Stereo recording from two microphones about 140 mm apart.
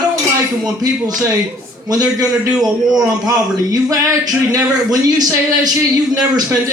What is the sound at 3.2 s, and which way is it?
Speech, 25° right (ahead or behind).